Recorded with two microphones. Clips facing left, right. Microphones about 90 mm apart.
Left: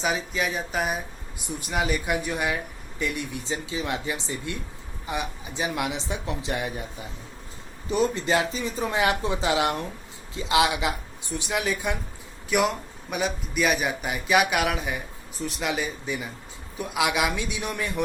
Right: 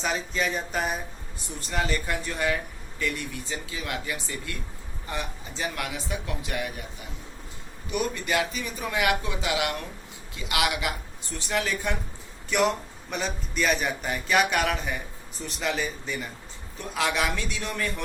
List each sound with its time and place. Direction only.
0.0 s a man's voice: 5° left (ahead or behind)